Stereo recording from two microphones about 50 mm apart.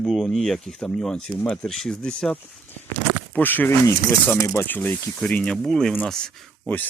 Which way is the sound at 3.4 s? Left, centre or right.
Left.